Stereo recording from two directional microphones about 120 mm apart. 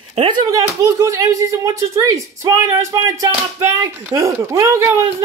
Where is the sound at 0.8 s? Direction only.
25° right (ahead or behind).